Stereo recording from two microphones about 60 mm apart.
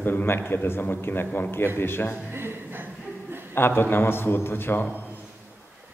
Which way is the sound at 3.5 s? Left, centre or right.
Left.